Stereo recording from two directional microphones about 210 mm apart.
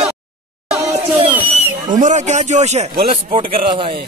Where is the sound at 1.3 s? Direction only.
10° right (ahead or behind).